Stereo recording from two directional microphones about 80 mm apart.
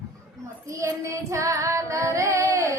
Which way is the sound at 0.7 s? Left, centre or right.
Right.